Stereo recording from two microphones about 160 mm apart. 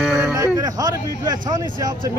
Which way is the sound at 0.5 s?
20° right (ahead or behind).